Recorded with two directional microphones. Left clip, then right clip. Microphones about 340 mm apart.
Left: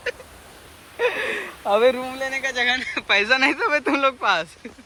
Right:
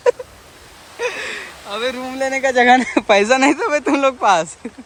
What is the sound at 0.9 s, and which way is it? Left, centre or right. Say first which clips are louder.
Gasp: left 1 dB; centre.